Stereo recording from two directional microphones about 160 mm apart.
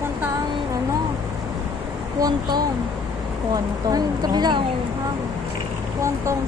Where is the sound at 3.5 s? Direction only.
25° right (ahead or behind).